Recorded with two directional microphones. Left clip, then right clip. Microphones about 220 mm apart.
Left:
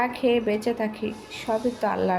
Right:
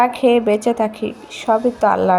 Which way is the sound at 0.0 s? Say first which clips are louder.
Right 9 dB; 25° right (ahead or behind).